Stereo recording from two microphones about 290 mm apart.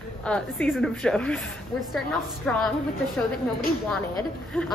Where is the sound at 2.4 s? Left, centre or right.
Centre.